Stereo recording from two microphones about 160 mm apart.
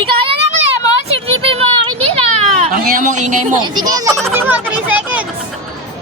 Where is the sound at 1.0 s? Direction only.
35° right (ahead or behind).